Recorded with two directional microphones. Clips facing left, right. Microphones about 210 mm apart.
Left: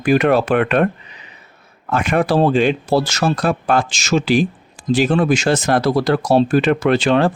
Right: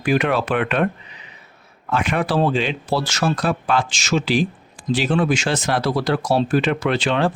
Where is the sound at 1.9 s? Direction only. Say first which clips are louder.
Left 4 dB; 45° left (ahead or behind).